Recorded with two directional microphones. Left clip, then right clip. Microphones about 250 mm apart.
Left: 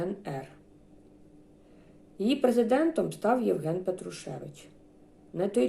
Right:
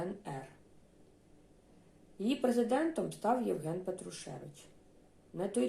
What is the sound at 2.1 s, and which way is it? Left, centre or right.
Speech, centre.